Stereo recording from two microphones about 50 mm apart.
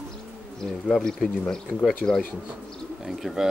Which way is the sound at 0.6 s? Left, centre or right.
Centre.